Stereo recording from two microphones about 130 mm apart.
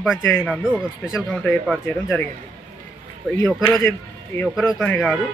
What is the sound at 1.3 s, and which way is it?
Speech, 10° left (ahead or behind).